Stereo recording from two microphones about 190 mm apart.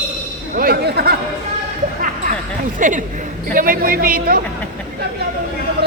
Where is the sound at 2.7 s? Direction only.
45° right (ahead or behind).